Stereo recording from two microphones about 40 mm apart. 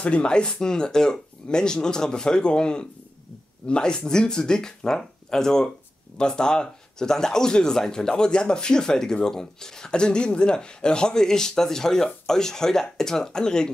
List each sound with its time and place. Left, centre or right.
0.0 s speech: left